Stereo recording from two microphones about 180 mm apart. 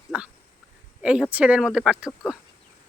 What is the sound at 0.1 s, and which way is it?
Dog, 5° right (ahead or behind).